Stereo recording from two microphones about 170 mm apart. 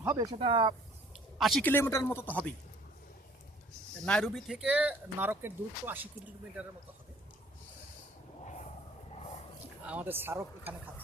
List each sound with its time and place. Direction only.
0.0 s speech: 20° right (ahead or behind)
0.3 s speech: 30° right (ahead or behind)
1.4 s a man's voice: centre (ahead or behind)
1.6 s speech: 15° left (ahead or behind)
4.0 s speech: 5° left (ahead or behind); by 6.1 s 10° right (ahead or behind)
9.8 s speech: 10° right (ahead or behind)